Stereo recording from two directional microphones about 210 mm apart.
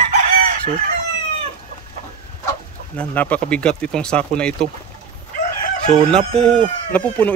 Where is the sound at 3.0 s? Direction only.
5° left (ahead or behind).